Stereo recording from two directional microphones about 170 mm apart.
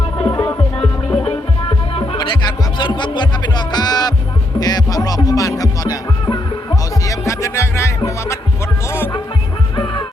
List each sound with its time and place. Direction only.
0.2 s music: 25° left (ahead or behind)
0.4 s music: 5° left (ahead or behind)
1.2 s music: 35° left (ahead or behind)
4.6 s speech: 20° left (ahead or behind)
7.0 s music: 20° left (ahead or behind)